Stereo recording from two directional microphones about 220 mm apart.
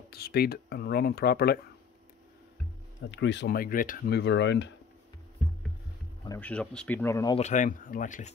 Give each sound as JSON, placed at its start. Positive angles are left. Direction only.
{"t": 0.1, "sound": "speech", "side_deg": 45}
{"t": 3.1, "sound": "speech", "side_deg": 55}
{"t": 6.2, "sound": "speech", "side_deg": 10}
{"t": 7.3, "sound": "speech", "side_deg": 35}